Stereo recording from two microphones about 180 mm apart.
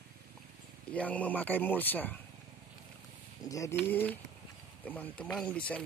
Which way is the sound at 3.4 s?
20° left (ahead or behind).